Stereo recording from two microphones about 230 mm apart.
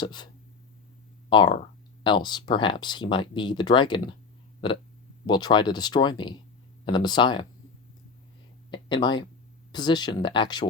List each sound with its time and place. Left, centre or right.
0.0 s speech: centre
1.3 s speech: left
8.7 s speech: centre